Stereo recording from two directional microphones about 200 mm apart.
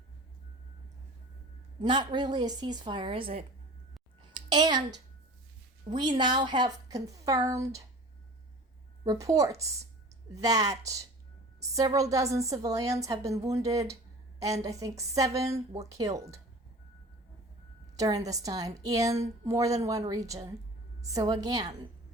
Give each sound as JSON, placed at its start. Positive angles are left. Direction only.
{"t": 1.8, "sound": "a woman's voice", "side_deg": -20}
{"t": 4.4, "sound": "a sound", "side_deg": -20}
{"t": 5.9, "sound": "a woman's voice", "side_deg": -20}
{"t": 9.0, "sound": "a woman's voice", "side_deg": -15}
{"t": 17.9, "sound": "a woman's voice", "side_deg": -15}